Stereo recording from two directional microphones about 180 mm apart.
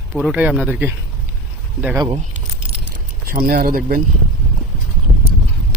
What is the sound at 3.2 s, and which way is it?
Speech, 50° right (ahead or behind).